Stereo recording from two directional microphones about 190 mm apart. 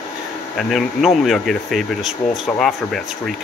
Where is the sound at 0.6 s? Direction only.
Centre (ahead or behind).